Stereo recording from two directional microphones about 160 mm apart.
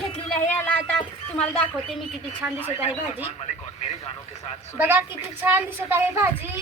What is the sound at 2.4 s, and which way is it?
Speech, 10° right (ahead or behind).